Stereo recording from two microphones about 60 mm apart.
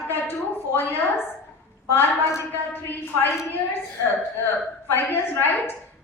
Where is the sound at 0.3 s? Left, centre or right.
Left.